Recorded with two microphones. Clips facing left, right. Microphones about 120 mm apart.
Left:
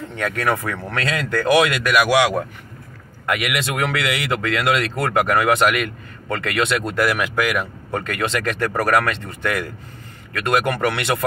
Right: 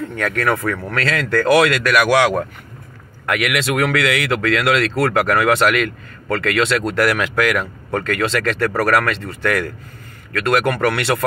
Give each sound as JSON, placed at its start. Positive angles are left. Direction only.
{"t": 0.1, "sound": "speech", "side_deg": 20}
{"t": 3.3, "sound": "speech", "side_deg": 20}